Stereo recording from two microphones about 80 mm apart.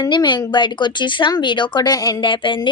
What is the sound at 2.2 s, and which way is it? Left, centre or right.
Music, left.